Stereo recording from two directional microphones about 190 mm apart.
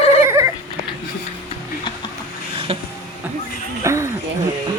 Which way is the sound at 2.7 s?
30° right (ahead or behind).